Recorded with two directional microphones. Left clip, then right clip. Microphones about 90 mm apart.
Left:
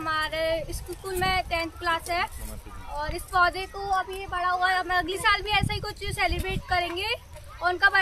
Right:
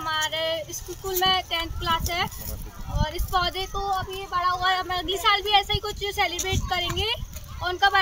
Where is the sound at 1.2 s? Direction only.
15° left (ahead or behind).